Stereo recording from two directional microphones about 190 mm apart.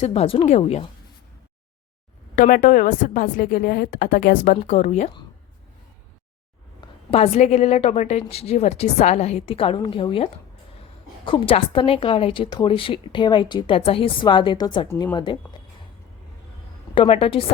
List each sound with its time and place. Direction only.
0.0 s a woman's voice: 30° left (ahead or behind)
2.3 s a woman's voice: 45° left (ahead or behind)
7.1 s a woman's voice: 35° left (ahead or behind)
11.3 s a woman's voice: 25° left (ahead or behind)
16.9 s a woman's voice: 30° left (ahead or behind)